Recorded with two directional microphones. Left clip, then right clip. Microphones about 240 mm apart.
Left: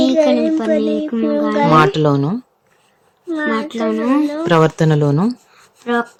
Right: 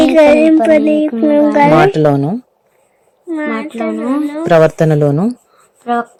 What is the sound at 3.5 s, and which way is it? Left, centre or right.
Speech, centre.